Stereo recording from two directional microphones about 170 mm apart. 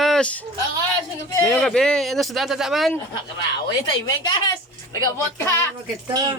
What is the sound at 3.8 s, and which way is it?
Speech, 25° left (ahead or behind).